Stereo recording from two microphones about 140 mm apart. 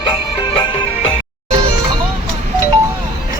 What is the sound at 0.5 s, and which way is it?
Music, 35° left (ahead or behind).